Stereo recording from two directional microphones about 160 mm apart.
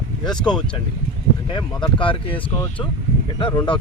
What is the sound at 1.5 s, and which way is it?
Speech, 30° left (ahead or behind).